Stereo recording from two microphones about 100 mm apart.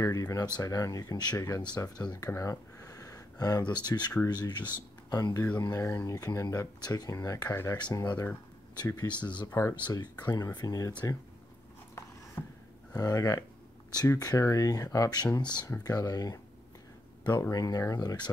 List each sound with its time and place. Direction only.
0.0 s speech: 35° left (ahead or behind)
9.5 s speech: 30° left (ahead or behind)
9.8 s speech: 45° left (ahead or behind)
12.4 s gasp: 25° left (ahead or behind)
12.9 s speech: 35° left (ahead or behind)
17.4 s speech: 35° left (ahead or behind)